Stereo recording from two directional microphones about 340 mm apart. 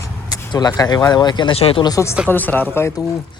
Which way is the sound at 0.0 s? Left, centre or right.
Centre.